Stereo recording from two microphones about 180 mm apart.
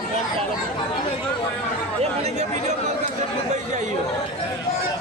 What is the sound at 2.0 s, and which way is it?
Chatter, 40° right (ahead or behind).